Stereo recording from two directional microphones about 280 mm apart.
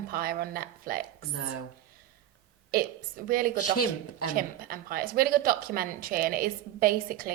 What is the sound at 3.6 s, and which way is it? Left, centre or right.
Speech, left.